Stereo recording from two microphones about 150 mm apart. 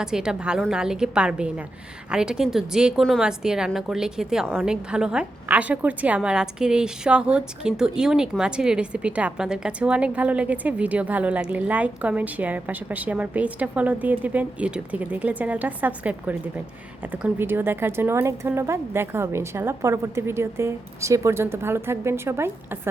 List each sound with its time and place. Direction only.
0.0 s a woman's voice: 5° right (ahead or behind)